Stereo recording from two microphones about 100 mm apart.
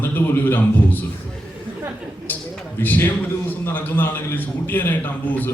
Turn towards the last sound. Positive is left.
turn(degrees=15)  # may be behind; listen again after turning